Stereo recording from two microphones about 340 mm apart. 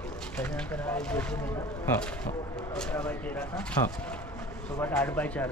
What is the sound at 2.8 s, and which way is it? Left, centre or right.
Speech, centre.